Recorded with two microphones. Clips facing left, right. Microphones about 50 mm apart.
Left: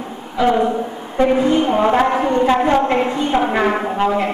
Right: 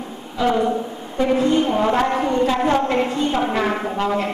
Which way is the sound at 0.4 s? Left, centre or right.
Left.